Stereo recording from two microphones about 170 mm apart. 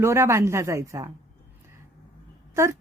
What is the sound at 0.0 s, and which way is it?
A woman's voice, 15° right (ahead or behind).